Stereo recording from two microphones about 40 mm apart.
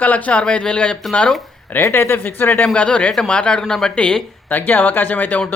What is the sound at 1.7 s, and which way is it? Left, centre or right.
Speech, left.